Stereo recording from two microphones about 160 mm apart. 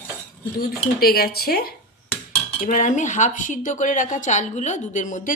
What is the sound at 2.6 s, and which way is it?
Speech, 55° left (ahead or behind).